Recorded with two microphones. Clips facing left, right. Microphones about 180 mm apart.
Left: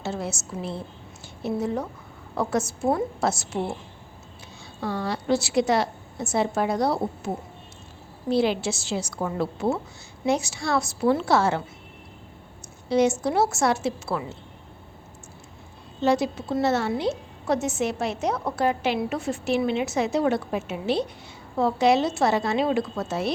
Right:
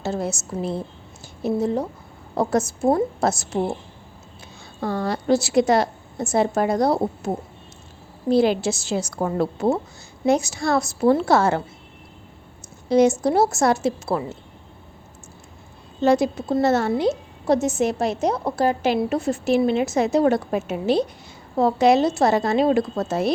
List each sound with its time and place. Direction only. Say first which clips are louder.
0.0 s a woman's voice: right 5 dB; 40° right (ahead or behind)
1.4 s a woman's voice: right 5 dB; 35° right (ahead or behind)
4.8 s a woman's voice: right 4 dB; 45° right (ahead or behind)
8.3 s a woman's voice: right 4 dB; 45° right (ahead or behind)
12.9 s a woman's voice: right 5 dB; 40° right (ahead or behind)
16.0 s a woman's voice: right 4 dB; 45° right (ahead or behind)